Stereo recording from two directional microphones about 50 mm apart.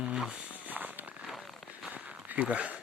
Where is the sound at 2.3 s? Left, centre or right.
Right.